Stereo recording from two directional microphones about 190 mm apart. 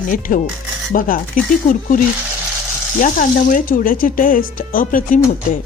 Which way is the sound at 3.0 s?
45° left (ahead or behind).